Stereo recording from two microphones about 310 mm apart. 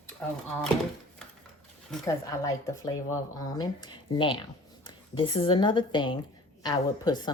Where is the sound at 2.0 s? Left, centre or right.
Centre.